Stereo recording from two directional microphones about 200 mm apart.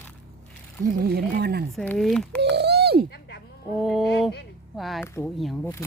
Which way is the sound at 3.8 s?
Centre (ahead or behind).